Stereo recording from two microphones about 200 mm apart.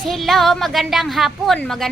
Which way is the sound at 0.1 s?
Centre (ahead or behind).